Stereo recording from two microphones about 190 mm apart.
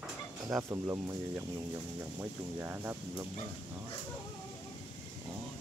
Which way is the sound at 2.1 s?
10° right (ahead or behind).